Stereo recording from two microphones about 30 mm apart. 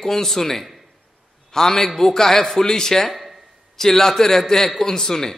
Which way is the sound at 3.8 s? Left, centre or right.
Centre.